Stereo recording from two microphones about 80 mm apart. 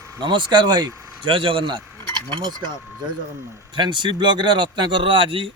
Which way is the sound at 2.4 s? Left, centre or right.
Right.